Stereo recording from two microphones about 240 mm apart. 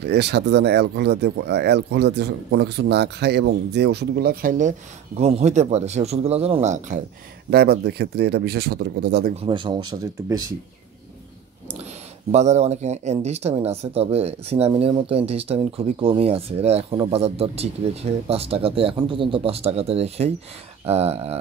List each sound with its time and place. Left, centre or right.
0.0 s speech: right
7.4 s speech: right
9.4 s speech: centre
11.8 s speech: right